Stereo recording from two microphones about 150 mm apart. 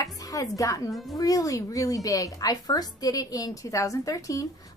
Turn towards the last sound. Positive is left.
turn(degrees=20)  # may be behind; listen again after turning